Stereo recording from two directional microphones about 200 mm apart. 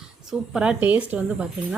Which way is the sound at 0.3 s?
5° right (ahead or behind).